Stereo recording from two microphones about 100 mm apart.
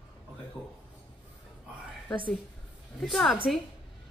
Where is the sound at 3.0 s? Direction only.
5° left (ahead or behind).